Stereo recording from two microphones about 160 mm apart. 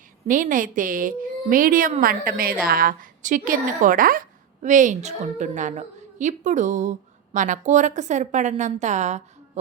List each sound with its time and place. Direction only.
0.3 s a woman's voice: 55° right (ahead or behind)